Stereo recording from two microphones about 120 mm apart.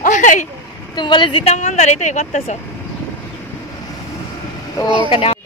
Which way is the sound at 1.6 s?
75° left (ahead or behind).